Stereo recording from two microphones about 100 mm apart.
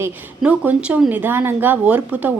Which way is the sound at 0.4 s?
15° right (ahead or behind).